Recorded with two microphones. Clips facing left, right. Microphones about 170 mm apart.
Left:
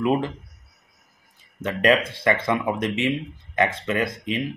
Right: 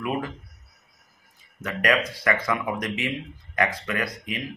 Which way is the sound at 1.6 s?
25° left (ahead or behind).